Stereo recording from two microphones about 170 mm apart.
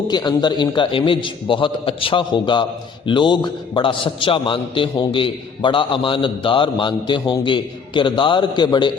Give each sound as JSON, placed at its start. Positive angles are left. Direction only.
{"t": 0.1, "sound": "a man's voice", "side_deg": 25}